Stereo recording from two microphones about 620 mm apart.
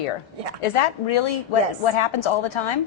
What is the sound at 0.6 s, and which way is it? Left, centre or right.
Speech, left.